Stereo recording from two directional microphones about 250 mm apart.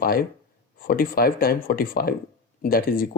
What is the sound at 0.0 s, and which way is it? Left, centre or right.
Speech, left.